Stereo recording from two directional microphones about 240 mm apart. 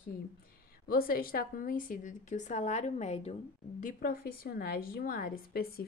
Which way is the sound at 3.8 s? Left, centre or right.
Left.